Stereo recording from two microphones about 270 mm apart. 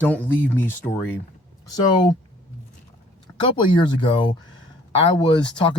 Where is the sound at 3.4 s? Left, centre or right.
Centre.